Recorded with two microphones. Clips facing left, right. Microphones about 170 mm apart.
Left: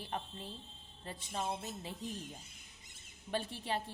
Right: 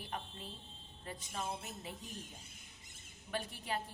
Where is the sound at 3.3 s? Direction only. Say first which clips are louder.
Left 3 dB; 30° left (ahead or behind).